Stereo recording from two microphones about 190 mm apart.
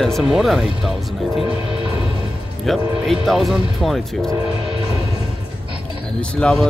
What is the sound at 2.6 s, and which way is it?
Speech, centre (ahead or behind).